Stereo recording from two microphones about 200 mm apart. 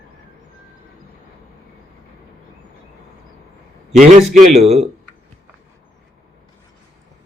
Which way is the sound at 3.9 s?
40° right (ahead or behind).